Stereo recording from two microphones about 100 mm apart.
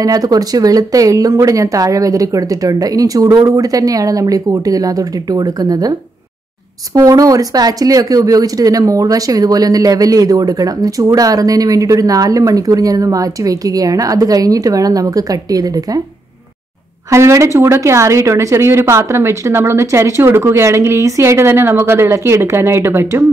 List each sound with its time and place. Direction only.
0.0 s speech: 40° right (ahead or behind)
17.1 s speech: 30° right (ahead or behind)